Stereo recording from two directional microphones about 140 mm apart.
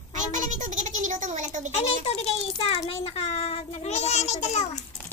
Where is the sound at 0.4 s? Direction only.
65° right (ahead or behind).